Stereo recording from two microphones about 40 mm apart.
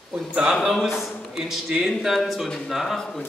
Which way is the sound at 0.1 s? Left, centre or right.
Right.